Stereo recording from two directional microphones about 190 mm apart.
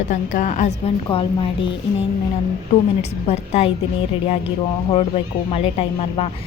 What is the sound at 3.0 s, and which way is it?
Speech, 35° left (ahead or behind).